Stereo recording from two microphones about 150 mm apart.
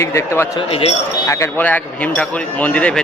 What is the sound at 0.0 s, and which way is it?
Speech, 20° left (ahead or behind).